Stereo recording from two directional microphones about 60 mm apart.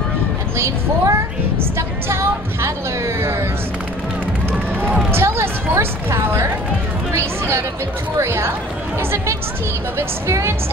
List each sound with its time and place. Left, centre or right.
0.6 s a child's voice: right
1.8 s music: right
5.1 s a woman's voice: right
8.2 s music: right